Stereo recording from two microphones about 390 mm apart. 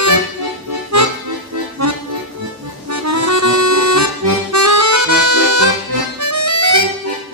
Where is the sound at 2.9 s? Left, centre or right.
Right.